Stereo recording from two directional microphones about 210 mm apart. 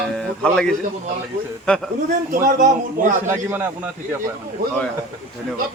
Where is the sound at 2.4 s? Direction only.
40° right (ahead or behind).